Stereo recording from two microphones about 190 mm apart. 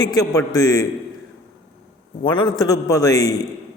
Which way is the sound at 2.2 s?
25° left (ahead or behind).